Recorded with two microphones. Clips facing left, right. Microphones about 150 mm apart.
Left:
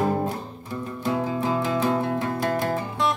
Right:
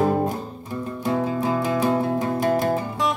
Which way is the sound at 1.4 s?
15° right (ahead or behind).